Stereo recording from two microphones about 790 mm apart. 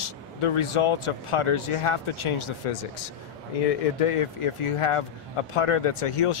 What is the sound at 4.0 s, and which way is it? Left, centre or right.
Speech, left.